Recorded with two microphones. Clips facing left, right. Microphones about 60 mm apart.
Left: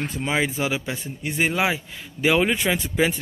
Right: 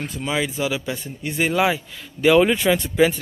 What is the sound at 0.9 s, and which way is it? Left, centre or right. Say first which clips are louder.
Speech: right 1 dB; centre.